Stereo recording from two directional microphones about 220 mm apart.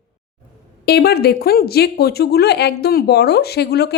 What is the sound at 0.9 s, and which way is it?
Speech, 45° left (ahead or behind).